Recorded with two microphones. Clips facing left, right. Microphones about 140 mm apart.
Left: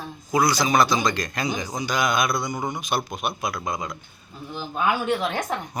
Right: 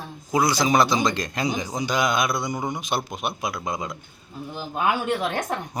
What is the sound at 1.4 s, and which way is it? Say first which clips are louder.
Speech: right 2 dB; 15° right (ahead or behind).